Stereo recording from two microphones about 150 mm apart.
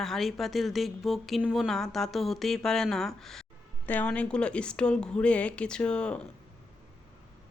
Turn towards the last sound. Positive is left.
turn(degrees=5)  # may be behind; listen again after turning